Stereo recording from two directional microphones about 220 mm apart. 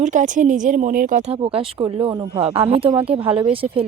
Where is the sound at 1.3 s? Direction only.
25° right (ahead or behind).